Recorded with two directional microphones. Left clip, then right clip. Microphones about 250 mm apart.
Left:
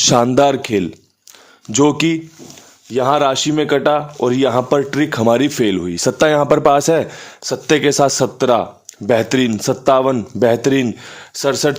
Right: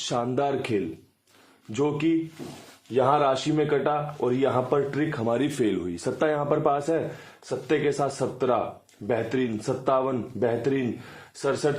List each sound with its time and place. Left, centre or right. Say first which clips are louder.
0.1 s speech: left 11 dB; left
1.7 s speech: left 10 dB; left